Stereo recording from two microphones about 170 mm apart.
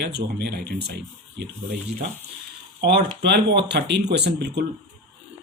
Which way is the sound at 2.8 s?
75° right (ahead or behind).